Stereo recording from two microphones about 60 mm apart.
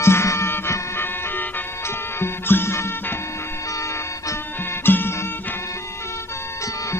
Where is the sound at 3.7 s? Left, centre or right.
Left.